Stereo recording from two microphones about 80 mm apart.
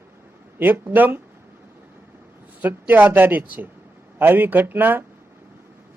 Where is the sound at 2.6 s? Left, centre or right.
Right.